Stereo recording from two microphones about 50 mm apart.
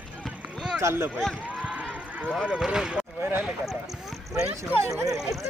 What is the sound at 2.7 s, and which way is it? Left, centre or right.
Speech, centre.